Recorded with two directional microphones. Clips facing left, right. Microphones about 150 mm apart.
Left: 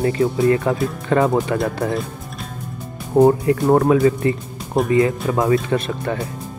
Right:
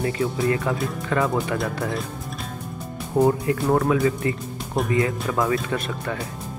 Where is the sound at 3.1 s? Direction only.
35° left (ahead or behind).